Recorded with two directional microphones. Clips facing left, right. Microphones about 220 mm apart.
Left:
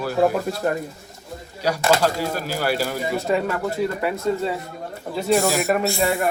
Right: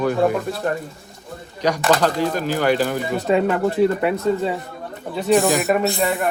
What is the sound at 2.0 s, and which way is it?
Speech, 10° left (ahead or behind).